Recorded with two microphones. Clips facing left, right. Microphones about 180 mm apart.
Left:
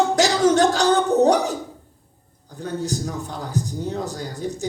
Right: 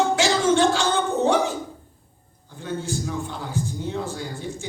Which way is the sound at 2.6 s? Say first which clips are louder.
Left 2 dB; 40° left (ahead or behind).